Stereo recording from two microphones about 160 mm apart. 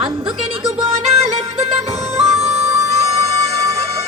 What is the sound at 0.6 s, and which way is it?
Music, 35° right (ahead or behind).